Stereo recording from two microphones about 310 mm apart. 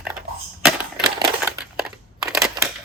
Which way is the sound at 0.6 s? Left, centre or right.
Centre.